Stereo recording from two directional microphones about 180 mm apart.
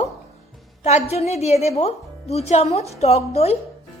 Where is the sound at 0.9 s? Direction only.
35° left (ahead or behind).